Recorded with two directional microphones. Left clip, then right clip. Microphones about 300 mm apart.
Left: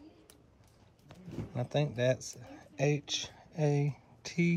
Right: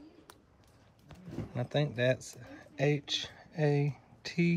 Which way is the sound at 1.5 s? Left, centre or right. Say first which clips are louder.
Even; centre.